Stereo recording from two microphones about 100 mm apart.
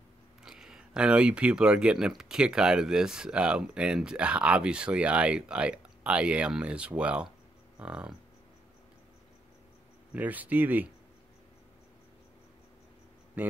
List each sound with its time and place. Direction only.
0.4 s speech: 5° right (ahead or behind)
10.1 s speech: 15° right (ahead or behind)
13.4 s speech: 15° right (ahead or behind)